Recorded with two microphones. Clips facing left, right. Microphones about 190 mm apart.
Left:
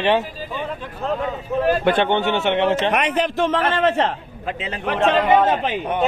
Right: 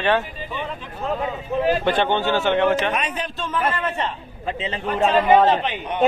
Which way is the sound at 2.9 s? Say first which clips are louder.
Left 6 dB; 80° left.